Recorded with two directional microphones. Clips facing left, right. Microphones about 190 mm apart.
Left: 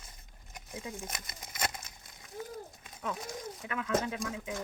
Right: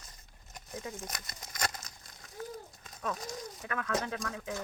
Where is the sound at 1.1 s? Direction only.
25° left (ahead or behind).